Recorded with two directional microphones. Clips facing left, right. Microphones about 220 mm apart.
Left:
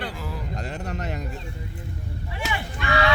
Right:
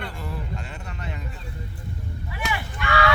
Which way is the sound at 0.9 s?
40° left (ahead or behind).